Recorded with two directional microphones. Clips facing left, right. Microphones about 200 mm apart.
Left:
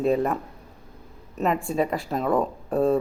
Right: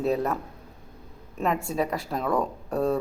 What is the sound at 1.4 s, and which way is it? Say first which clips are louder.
A woman's voice: left 3 dB; centre (ahead or behind).